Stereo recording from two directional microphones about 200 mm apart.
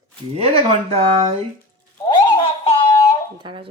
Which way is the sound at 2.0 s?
25° left (ahead or behind).